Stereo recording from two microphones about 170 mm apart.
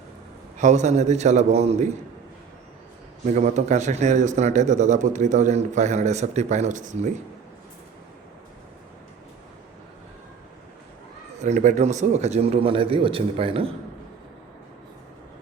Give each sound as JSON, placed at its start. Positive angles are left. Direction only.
{"t": 0.6, "sound": "a man's voice", "side_deg": -45}
{"t": 3.2, "sound": "a man's voice", "side_deg": -45}
{"t": 11.4, "sound": "a man's voice", "side_deg": -45}